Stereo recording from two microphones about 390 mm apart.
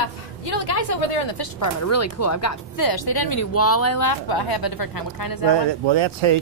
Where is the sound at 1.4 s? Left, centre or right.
Left.